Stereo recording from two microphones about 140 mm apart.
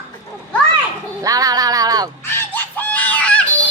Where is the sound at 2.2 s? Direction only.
15° left (ahead or behind).